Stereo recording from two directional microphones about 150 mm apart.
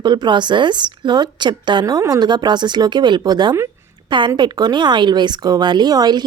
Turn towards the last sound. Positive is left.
turn(degrees=-25)  # may be behind; listen again after turning